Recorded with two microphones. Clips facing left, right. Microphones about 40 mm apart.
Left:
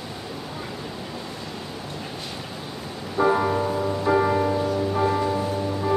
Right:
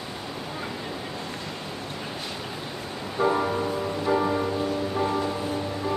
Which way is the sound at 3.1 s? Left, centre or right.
Centre.